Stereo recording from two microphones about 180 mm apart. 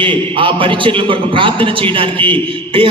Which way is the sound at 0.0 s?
30° right (ahead or behind).